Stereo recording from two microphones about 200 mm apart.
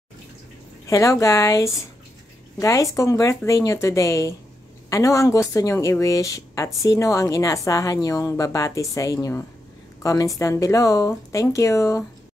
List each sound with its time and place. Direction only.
0.8 s speech: 15° left (ahead or behind)